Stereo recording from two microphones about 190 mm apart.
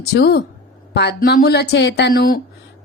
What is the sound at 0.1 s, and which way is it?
A woman's voice, 60° left (ahead or behind).